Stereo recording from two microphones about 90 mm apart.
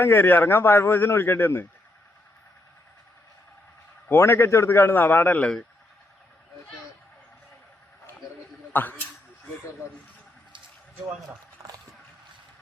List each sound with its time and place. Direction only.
0.0 s a man's voice: 25° left (ahead or behind)
4.1 s a man's voice: 25° left (ahead or behind)
8.7 s a man's voice: 20° left (ahead or behind)
11.6 s a sound: 35° right (ahead or behind)